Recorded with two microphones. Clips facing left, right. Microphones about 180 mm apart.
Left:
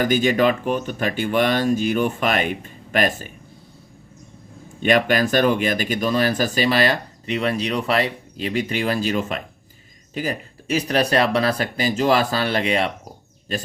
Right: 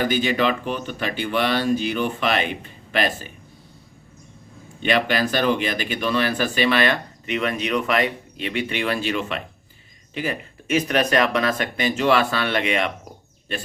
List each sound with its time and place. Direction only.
0.0 s speech: 45° left (ahead or behind)
4.8 s speech: 45° left (ahead or behind)